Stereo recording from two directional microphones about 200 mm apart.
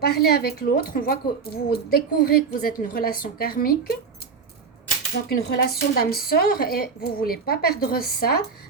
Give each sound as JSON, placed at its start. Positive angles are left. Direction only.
{"t": 0.0, "sound": "a woman's voice", "side_deg": 50}
{"t": 5.3, "sound": "a woman's voice", "side_deg": 50}